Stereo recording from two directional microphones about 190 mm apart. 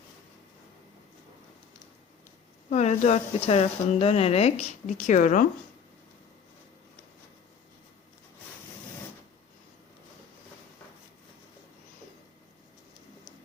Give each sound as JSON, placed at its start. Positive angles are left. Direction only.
{"t": 2.6, "sound": "speech", "side_deg": 35}